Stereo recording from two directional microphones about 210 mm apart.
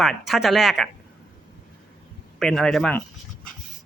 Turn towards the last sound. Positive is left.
turn(degrees=5)  # may be behind; listen again after turning